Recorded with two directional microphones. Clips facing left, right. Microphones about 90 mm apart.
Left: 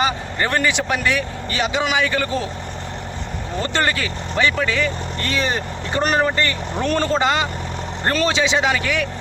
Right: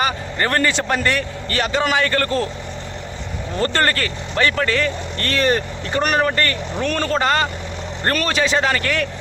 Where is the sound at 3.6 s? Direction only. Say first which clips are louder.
Right 2 dB; 10° left (ahead or behind).